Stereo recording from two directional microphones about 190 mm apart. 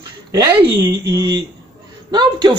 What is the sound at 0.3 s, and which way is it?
Speech, 20° right (ahead or behind).